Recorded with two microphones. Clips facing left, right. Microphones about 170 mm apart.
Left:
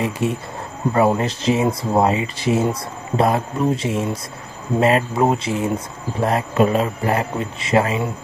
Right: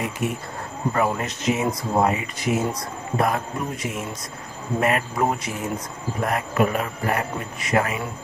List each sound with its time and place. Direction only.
0.0 s speech: 30° left (ahead or behind)